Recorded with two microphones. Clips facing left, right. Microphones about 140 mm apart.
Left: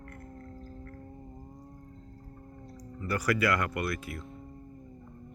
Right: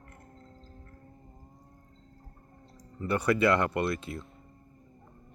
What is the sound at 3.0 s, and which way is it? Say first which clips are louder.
Speech: right 3 dB; 25° right (ahead or behind).